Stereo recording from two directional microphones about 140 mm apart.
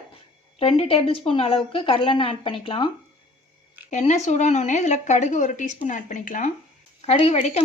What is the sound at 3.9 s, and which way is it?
Speech, 55° left (ahead or behind).